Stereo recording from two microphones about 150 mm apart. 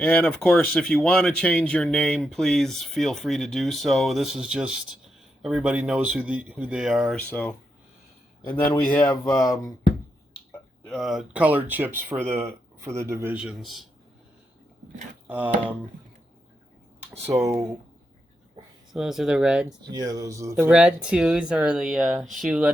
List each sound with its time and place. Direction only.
0.0 s speech: 5° left (ahead or behind)
8.8 s speech: 5° left (ahead or behind)
10.8 s speech: centre (ahead or behind); by 13.3 s 20° right (ahead or behind)
13.3 s speech: 5° right (ahead or behind)
15.3 s speech: 10° right (ahead or behind)
17.1 s speech: 20° right (ahead or behind)
18.9 s speech: centre (ahead or behind)
19.6 s speech: 25° right (ahead or behind)
20.6 s speech: 5° right (ahead or behind)